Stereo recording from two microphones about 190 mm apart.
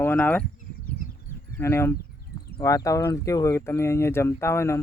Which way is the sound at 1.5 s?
15° left (ahead or behind).